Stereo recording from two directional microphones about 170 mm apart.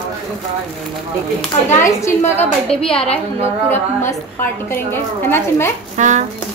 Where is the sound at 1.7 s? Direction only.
15° left (ahead or behind).